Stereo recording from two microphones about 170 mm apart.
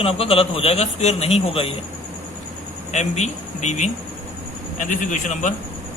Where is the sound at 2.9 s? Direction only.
40° left (ahead or behind).